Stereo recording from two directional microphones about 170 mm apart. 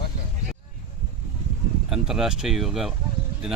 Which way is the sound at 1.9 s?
5° right (ahead or behind).